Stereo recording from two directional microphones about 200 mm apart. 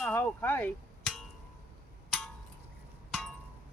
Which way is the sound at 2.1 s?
Centre (ahead or behind).